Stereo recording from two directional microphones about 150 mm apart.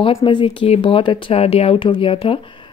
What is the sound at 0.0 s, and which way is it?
Speech, 35° left (ahead or behind).